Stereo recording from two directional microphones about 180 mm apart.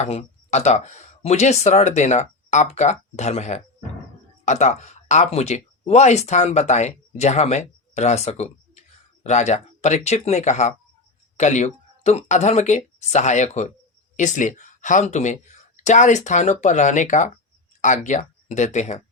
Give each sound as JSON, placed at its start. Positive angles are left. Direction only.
{"t": 0.0, "sound": "speech", "side_deg": 35}